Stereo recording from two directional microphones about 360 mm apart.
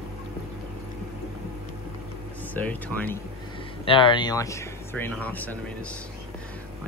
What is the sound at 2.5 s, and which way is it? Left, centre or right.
Speech, centre.